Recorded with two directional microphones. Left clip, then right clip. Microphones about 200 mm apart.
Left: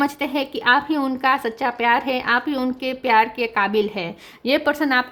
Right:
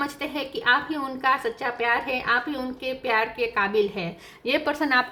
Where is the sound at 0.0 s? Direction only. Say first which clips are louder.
Left 7 dB; 45° left (ahead or behind).